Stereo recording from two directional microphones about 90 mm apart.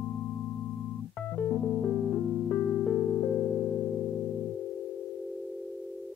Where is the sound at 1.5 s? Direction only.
20° left (ahead or behind).